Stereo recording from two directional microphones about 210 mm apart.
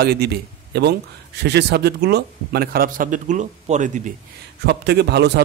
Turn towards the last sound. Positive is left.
turn(degrees=-50)  # may be behind; listen again after turning